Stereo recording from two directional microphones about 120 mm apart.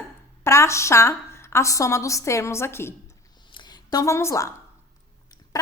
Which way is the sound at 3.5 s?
35° left (ahead or behind).